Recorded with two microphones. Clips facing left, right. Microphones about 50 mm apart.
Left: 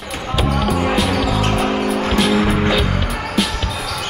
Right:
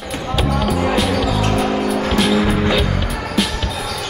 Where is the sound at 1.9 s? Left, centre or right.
Centre.